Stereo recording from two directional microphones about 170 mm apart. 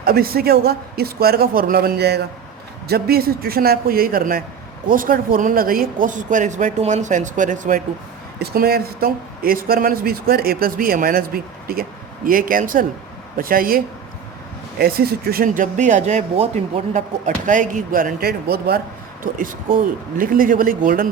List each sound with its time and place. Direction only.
0.0 s speech: 65° right (ahead or behind)
8.4 s speech: 65° right (ahead or behind)
19.2 s speech: 55° right (ahead or behind)